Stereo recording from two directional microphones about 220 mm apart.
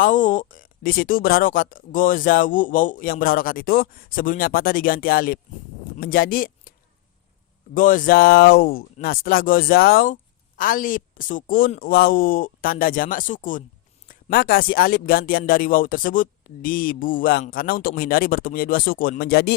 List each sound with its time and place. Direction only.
0.0 s a man's voice: 35° left (ahead or behind)
7.7 s a man's voice: 35° left (ahead or behind)